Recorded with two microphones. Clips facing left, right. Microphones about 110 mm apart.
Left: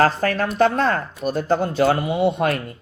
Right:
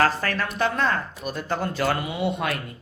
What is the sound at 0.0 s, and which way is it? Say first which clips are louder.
Speech: left 5 dB; 40° left (ahead or behind).